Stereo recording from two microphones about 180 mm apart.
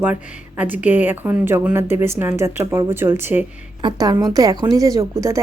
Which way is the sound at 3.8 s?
25° right (ahead or behind).